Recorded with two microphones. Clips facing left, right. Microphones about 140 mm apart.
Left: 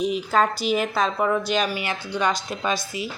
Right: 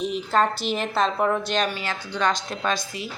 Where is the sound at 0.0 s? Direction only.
Centre (ahead or behind).